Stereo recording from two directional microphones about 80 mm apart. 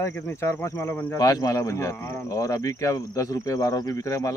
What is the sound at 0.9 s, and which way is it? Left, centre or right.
Speech, centre.